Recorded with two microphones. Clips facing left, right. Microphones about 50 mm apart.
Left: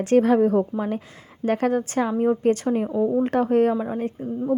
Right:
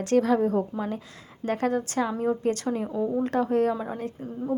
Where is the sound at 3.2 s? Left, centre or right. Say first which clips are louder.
Left 3 dB; left.